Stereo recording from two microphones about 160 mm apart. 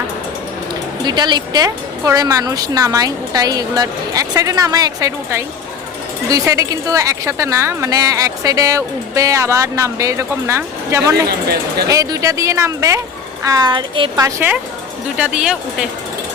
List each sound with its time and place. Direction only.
1.0 s speech: 25° right (ahead or behind)
14.3 s speech: 15° right (ahead or behind)